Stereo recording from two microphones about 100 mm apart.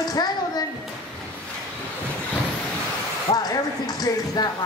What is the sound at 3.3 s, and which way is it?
A woman's voice, 40° left (ahead or behind).